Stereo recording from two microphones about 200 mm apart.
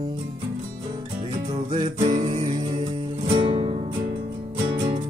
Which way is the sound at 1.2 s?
25° right (ahead or behind).